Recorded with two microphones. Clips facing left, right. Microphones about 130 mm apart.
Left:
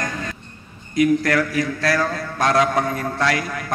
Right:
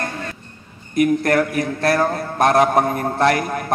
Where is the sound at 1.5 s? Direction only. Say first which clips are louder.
Right 2 dB; 55° right (ahead or behind).